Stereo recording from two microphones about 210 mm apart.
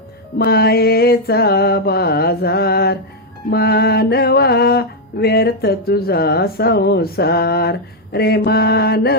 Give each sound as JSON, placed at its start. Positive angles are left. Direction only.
{"t": 0.3, "sound": "mantra", "side_deg": 50}